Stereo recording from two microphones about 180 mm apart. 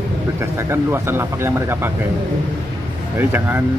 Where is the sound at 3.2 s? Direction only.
10° right (ahead or behind).